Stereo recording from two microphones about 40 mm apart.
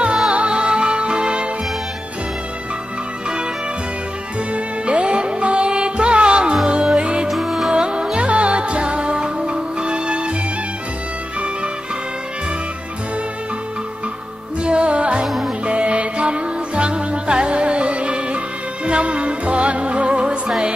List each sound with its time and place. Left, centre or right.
0.3 s music: right
4.5 s music: right
7.2 s music: centre
7.7 s music: right
14.6 s music: right
15.2 s music: centre
15.6 s music: right